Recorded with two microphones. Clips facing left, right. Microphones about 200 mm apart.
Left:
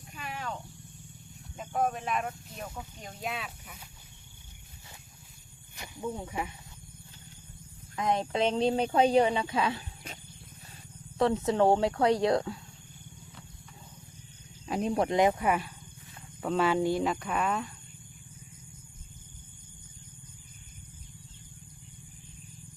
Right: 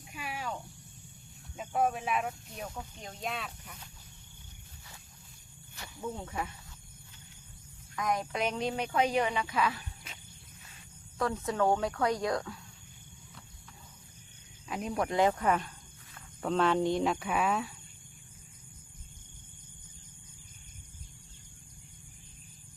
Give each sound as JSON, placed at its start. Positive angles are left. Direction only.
{"t": 0.1, "sound": "a sound", "side_deg": -10}
{"t": 1.5, "sound": "speech", "side_deg": -5}
{"t": 5.7, "sound": "speech", "side_deg": 15}
{"t": 7.9, "sound": "speech", "side_deg": 25}
{"t": 11.2, "sound": "speech", "side_deg": 25}
{"t": 14.7, "sound": "speech", "side_deg": 30}